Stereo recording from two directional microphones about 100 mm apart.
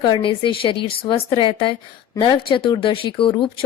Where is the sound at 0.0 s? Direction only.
55° left (ahead or behind).